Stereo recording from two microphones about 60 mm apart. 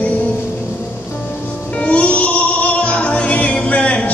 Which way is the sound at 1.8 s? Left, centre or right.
Left.